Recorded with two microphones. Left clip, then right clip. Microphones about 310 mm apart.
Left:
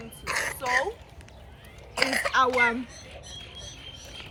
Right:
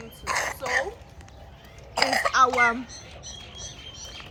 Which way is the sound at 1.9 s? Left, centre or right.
Right.